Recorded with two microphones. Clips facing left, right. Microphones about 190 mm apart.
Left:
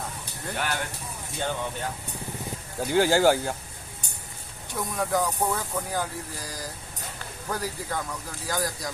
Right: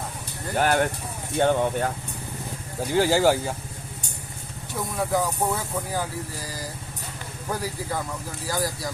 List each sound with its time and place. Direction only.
0.5 s speech: 50° right (ahead or behind)
2.8 s speech: centre (ahead or behind)
4.9 s speech: 5° right (ahead or behind)
7.5 s speech: 10° right (ahead or behind)